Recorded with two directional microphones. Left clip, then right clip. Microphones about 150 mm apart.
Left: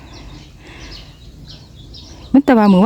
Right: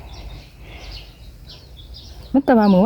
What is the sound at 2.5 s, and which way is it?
Speech, 75° left (ahead or behind).